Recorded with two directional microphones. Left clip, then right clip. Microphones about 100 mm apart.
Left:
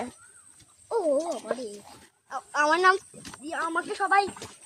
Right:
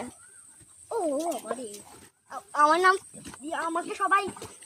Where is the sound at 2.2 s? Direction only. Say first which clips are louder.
Right 2 dB; 25° left (ahead or behind).